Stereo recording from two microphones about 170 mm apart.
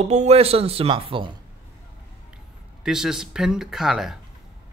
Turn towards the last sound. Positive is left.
turn(degrees=0)  # may be behind; listen again after turning